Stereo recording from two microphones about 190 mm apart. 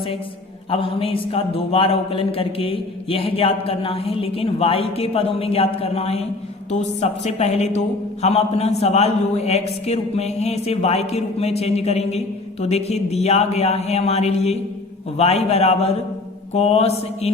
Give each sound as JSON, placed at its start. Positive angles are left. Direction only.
{"t": 0.7, "sound": "a man's voice", "side_deg": 30}